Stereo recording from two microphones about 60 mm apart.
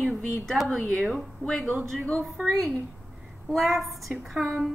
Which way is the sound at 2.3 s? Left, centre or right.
Centre.